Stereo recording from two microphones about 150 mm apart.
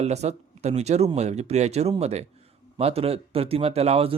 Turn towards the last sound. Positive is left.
turn(degrees=-40)  # may be behind; listen again after turning